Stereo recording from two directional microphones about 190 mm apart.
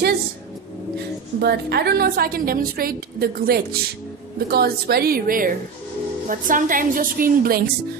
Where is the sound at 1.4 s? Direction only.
60° right (ahead or behind).